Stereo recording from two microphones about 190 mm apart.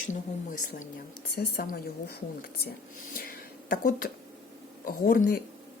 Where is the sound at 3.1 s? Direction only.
50° left (ahead or behind).